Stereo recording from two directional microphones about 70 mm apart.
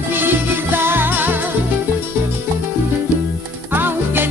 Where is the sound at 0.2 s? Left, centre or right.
Right.